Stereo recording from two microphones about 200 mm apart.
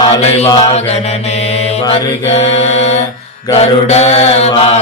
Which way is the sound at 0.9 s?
30° left (ahead or behind).